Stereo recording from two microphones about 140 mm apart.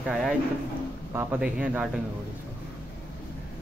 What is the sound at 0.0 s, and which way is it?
A man's voice, 5° right (ahead or behind).